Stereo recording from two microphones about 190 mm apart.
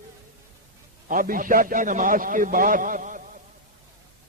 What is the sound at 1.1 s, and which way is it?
A man's voice, 45° right (ahead or behind).